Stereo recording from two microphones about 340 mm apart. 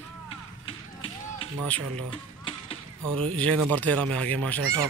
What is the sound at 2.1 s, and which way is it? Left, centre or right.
Typewriter, centre.